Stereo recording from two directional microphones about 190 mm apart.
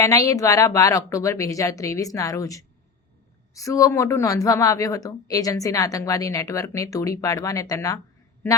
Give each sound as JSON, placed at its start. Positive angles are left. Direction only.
{"t": 0.0, "sound": "a woman's voice", "side_deg": 15}